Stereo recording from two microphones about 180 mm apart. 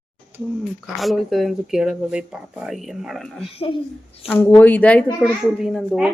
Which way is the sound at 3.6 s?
30° left (ahead or behind).